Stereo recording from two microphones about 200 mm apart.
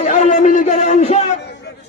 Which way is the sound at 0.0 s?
35° left (ahead or behind).